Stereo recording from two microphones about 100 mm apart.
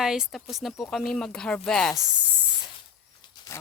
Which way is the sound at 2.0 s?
10° right (ahead or behind).